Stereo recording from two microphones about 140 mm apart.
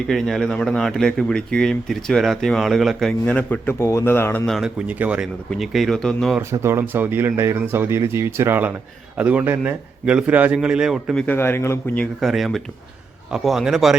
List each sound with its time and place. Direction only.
0.1 s speech: 5° left (ahead or behind)
4.5 s speech: 5° right (ahead or behind)
6.5 s speech: 20° right (ahead or behind); by 11.3 s 5° left (ahead or behind)
11.3 s speech: 15° left (ahead or behind)
11.9 s speech: centre (ahead or behind)